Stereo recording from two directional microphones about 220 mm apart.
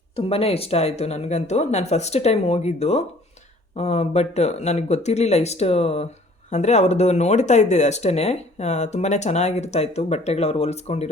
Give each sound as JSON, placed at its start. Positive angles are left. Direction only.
{"t": 0.2, "sound": "speech", "side_deg": 25}